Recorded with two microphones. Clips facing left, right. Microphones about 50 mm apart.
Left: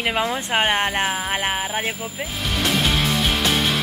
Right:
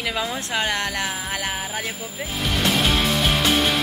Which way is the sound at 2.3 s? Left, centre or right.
Centre.